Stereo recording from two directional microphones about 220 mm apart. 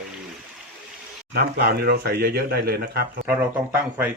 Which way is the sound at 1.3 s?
45° right (ahead or behind).